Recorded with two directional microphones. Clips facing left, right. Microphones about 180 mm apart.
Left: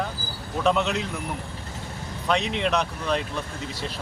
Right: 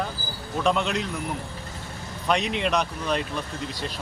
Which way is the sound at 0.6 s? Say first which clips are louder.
Left 1 dB; centre (ahead or behind).